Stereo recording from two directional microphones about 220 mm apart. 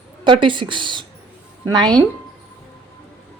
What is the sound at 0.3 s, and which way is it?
A woman's voice, 20° right (ahead or behind).